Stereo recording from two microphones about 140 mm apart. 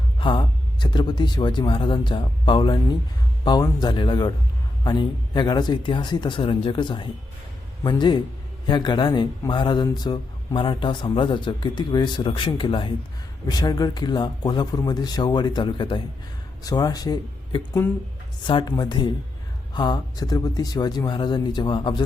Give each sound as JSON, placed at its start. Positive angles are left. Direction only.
{"t": 0.2, "sound": "a man's voice", "side_deg": 35}
{"t": 17.8, "sound": "speech", "side_deg": 15}
{"t": 18.4, "sound": "a man's voice", "side_deg": 30}